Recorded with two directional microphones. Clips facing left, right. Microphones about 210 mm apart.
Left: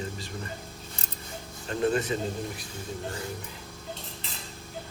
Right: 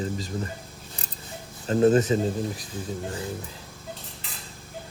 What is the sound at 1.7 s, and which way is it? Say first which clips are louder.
Speech: right 7 dB; 35° right (ahead or behind).